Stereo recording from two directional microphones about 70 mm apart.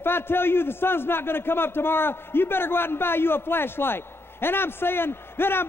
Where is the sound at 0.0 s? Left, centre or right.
Left.